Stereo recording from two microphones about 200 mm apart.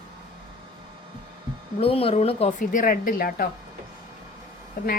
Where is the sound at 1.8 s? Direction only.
30° left (ahead or behind); by 3.5 s 45° left (ahead or behind).